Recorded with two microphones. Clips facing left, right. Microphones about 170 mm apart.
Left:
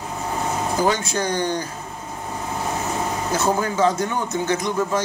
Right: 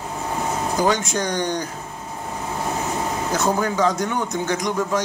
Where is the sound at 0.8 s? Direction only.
15° right (ahead or behind).